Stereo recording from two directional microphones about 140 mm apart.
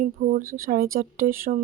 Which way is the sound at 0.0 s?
85° right.